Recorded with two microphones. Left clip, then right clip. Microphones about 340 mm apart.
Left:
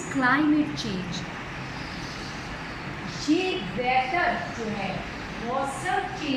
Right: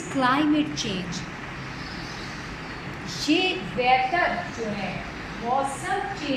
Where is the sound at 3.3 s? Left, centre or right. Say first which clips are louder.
Right 2 dB; right.